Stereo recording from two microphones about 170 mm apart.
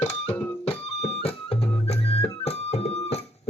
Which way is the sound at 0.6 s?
35° left (ahead or behind).